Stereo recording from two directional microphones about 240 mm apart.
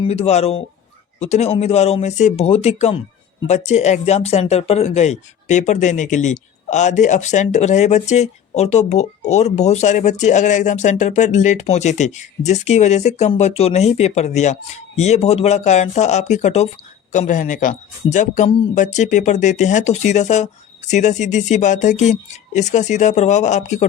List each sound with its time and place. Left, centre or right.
0.0 s speech: left